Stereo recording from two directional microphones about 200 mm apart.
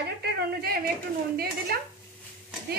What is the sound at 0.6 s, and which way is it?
Speech, 50° right (ahead or behind).